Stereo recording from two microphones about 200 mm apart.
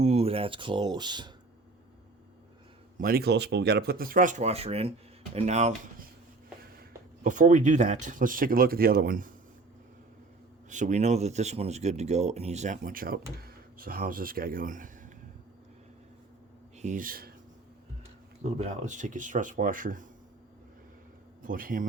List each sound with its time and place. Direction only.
0.0 s speech: 30° right (ahead or behind)
3.0 s speech: 50° right (ahead or behind)
7.3 s speech: 40° right (ahead or behind)
10.7 s speech: 40° right (ahead or behind)
16.7 s speech: 40° right (ahead or behind)
18.5 s speech: 35° right (ahead or behind)
21.4 s speech: 45° right (ahead or behind)